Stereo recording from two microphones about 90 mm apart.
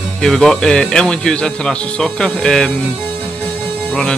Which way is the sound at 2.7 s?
20° left (ahead or behind).